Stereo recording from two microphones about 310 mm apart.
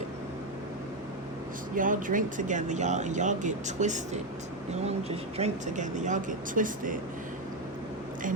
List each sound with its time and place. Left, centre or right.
1.7 s speech: right